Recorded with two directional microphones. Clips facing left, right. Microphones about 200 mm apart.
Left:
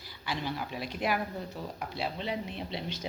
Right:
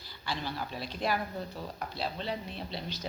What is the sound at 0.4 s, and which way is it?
A woman's voice, 15° left (ahead or behind).